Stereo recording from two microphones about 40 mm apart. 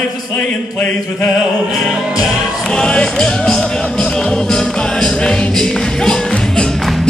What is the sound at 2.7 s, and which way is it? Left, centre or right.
Music, centre.